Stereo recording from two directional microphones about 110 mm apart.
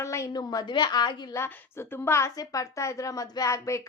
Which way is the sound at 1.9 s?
25° left (ahead or behind).